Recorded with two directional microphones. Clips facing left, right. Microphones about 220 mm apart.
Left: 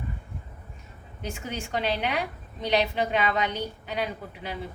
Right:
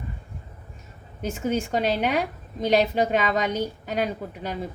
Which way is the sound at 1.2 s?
45° right (ahead or behind).